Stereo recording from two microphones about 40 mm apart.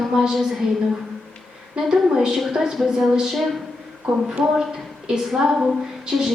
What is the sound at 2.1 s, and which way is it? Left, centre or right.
A woman's voice, centre.